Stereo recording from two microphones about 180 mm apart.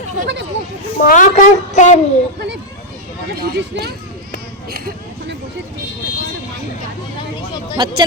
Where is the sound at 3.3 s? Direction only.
60° right (ahead or behind).